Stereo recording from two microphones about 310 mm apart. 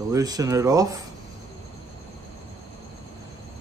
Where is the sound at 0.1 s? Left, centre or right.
Centre.